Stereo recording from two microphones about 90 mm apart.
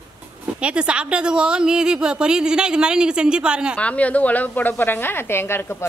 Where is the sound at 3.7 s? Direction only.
15° left (ahead or behind).